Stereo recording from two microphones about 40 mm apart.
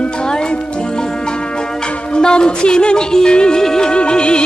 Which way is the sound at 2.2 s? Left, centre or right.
Left.